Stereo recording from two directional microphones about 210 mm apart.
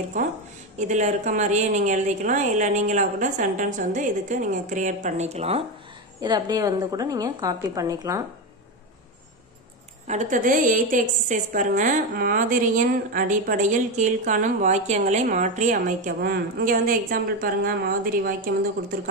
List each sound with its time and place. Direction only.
0.7 s a woman's voice: 35° right (ahead or behind)
6.2 s a woman's voice: 20° right (ahead or behind)
10.0 s a woman's voice: 35° right (ahead or behind)